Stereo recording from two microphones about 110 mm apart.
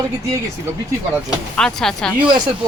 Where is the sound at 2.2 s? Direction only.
45° right (ahead or behind).